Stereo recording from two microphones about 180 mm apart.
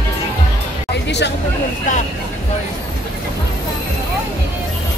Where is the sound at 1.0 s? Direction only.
70° left (ahead or behind).